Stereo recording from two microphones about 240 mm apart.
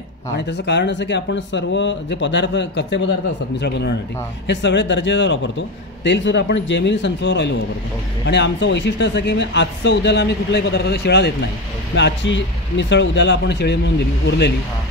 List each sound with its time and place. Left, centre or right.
0.4 s a man's voice: left